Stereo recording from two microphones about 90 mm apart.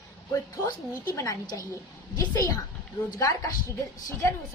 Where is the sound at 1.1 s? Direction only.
30° left (ahead or behind).